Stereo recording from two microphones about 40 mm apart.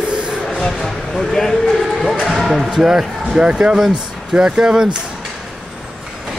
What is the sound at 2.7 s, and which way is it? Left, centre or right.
Speech, centre.